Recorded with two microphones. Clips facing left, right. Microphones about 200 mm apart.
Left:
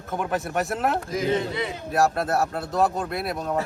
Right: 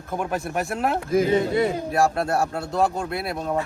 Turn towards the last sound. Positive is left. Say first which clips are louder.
# right 1 dB
turn(degrees=0)  # may be behind; listen again after turning